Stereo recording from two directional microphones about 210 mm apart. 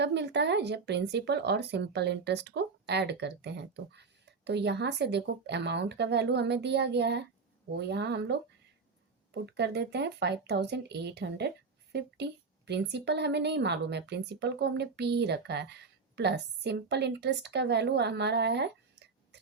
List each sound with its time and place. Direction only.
0.0 s speech: 55° right (ahead or behind)